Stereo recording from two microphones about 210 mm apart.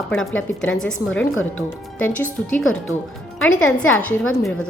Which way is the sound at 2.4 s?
70° left (ahead or behind).